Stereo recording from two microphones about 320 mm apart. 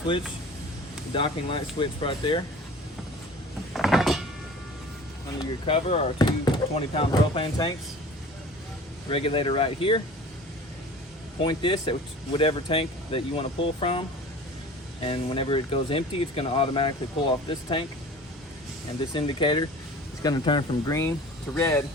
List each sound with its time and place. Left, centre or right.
1.1 s speech: centre
3.7 s a sound: centre
5.4 s speech: centre
9.0 s speech: centre
11.3 s speech: centre
15.0 s speech: centre
19.1 s speech: centre